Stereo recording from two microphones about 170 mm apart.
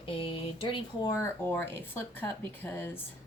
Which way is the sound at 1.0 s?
15° left (ahead or behind).